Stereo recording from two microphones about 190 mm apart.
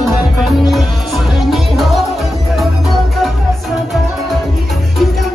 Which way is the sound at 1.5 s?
Centre (ahead or behind).